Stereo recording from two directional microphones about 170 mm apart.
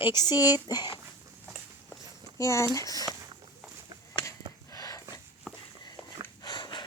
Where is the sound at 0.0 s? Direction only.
25° left (ahead or behind).